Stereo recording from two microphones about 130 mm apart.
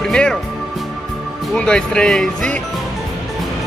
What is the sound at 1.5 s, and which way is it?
Speech, 5° left (ahead or behind).